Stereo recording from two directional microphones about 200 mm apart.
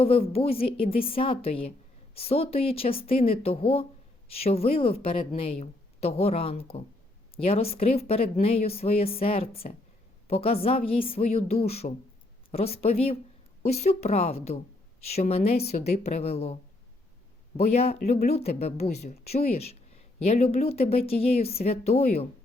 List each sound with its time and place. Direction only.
0.3 s speech: 30° left (ahead or behind)
17.6 s speech: 30° left (ahead or behind)